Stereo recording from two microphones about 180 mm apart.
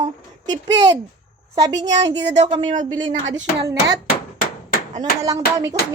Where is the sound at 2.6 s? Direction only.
45° right (ahead or behind).